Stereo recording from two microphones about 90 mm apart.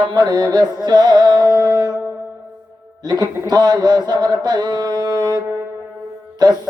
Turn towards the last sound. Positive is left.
turn(degrees=-50)  # may be behind; listen again after turning